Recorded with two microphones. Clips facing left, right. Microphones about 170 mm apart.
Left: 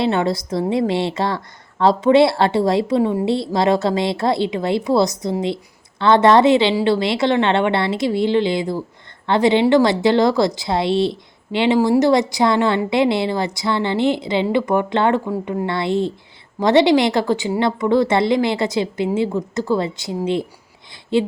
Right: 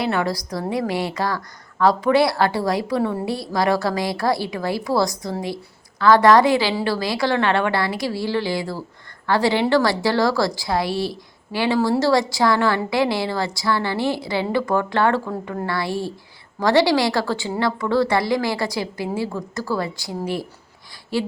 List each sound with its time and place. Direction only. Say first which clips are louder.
0.0 s a woman's voice: left 4 dB; 25° left (ahead or behind)